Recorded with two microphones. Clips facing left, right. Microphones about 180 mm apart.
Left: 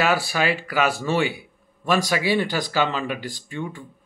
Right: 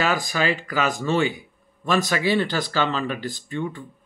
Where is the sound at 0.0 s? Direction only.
10° left (ahead or behind).